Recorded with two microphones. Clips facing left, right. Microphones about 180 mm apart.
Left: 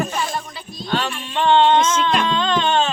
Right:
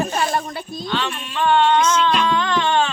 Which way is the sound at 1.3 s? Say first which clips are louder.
Left 2 dB; 25° left (ahead or behind).